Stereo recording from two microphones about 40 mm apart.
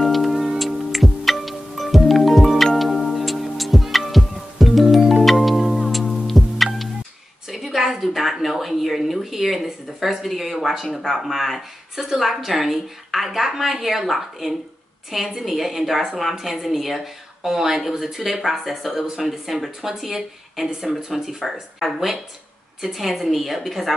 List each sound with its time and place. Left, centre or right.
0.0 s music: centre
7.5 s a sound: centre
11.2 s a woman's voice: centre